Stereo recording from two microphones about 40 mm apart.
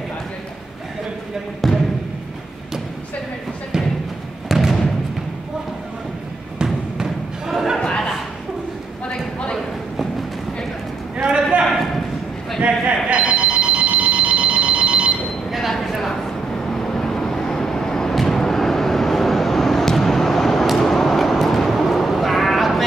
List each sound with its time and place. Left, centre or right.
1.6 s music: centre
4.5 s music: centre
6.6 s thump: centre
7.8 s a sound: left
11.7 s a sound: centre
12.6 s telephone bell ringing: right
15.8 s a sound: centre
16.1 s vehicle: centre
20.7 s sheep: centre